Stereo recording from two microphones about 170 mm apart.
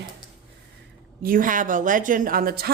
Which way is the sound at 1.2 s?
55° right (ahead or behind).